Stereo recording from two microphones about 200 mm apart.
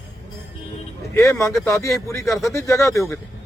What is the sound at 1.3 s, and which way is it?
Speech, 15° left (ahead or behind).